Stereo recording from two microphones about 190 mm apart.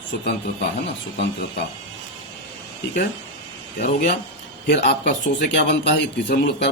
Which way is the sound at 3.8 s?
50° left (ahead or behind).